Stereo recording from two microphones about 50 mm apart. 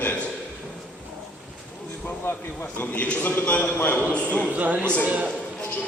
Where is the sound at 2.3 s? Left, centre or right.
Left.